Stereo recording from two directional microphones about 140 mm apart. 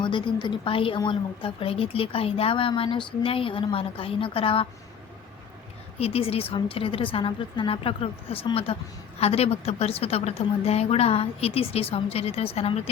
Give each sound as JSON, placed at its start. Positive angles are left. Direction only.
{"t": 0.0, "sound": "a woman's voice", "side_deg": 35}
{"t": 6.0, "sound": "a woman's voice", "side_deg": 45}